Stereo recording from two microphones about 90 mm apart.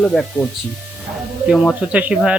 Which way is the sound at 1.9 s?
15° right (ahead or behind).